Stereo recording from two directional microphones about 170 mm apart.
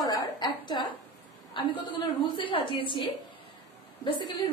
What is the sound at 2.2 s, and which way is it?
Speech, 30° left (ahead or behind).